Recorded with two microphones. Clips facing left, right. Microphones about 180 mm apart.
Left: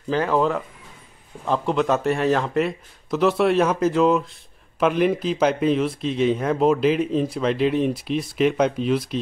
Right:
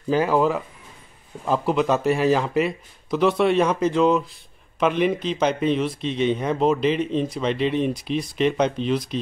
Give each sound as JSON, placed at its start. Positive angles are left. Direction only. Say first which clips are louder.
{"t": 0.1, "sound": "speech", "louder": "right 1 dB", "side_deg": -10}